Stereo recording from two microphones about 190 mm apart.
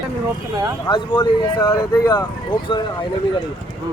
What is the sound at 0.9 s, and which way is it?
Speech, 20° left (ahead or behind).